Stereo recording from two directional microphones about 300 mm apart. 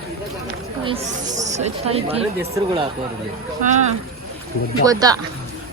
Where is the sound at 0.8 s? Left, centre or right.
Centre.